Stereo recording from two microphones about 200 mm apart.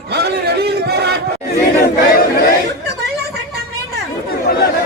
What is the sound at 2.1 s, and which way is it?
Battle cry, 45° left (ahead or behind).